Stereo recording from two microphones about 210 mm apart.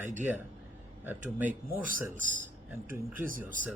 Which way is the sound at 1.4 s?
10° right (ahead or behind).